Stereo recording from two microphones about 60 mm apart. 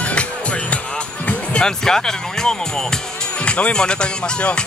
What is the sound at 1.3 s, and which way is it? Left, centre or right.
Speech, centre.